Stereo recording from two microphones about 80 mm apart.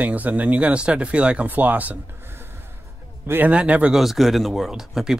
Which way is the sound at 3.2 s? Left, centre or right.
Right.